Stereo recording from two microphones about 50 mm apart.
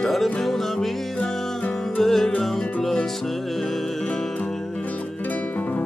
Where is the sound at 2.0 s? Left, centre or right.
Centre.